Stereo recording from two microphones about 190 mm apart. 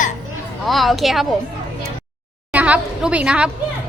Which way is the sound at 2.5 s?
5° right (ahead or behind).